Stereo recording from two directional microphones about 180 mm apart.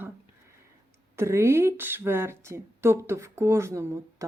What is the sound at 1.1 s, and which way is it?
Speech, 15° right (ahead or behind).